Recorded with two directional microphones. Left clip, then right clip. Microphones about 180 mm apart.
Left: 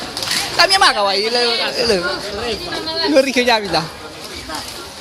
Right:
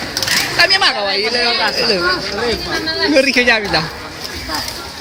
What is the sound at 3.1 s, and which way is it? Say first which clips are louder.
Speech: right 1 dB; 25° left (ahead or behind).